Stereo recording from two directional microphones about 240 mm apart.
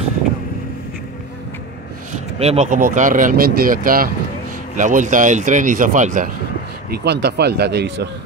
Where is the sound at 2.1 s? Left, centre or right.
Right.